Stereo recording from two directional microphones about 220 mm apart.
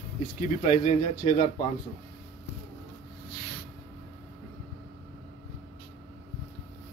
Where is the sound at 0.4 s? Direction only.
35° left (ahead or behind).